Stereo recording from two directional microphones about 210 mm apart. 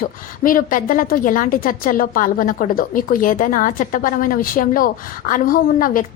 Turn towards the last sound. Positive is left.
turn(degrees=40)  # may be behind; listen again after turning